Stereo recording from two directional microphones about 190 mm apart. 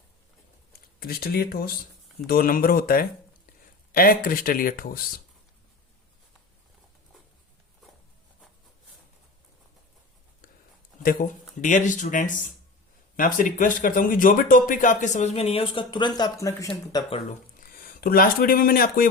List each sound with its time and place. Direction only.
0.7 s a sound: 50° left (ahead or behind)
2.2 s speech: 50° left (ahead or behind)
11.0 s speech: 45° left (ahead or behind); by 16.6 s 15° left (ahead or behind)
17.2 s speech: 50° left (ahead or behind)